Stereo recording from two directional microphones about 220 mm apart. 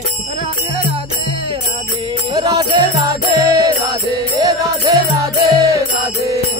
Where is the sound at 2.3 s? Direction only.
15° right (ahead or behind).